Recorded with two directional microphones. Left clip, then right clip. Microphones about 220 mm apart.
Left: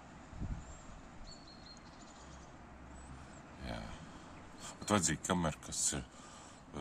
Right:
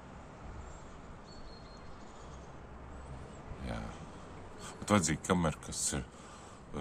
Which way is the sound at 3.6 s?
10° left (ahead or behind).